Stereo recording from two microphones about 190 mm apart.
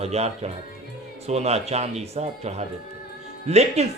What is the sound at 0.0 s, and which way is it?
Speech, 35° right (ahead or behind).